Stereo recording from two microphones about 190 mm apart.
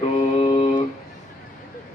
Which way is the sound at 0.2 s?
30° left (ahead or behind).